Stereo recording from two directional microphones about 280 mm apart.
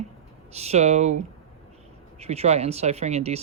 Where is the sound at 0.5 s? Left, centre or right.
Right.